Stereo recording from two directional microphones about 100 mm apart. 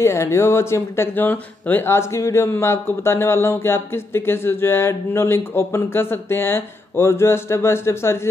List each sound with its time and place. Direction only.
0.0 s speech: 25° left (ahead or behind)